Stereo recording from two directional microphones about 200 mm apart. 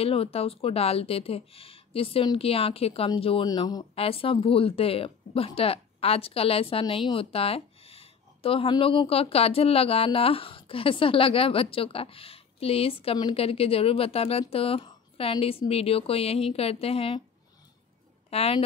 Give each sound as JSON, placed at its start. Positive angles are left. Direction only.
{"t": 0.0, "sound": "speech", "side_deg": 30}
{"t": 18.3, "sound": "a woman's voice", "side_deg": 30}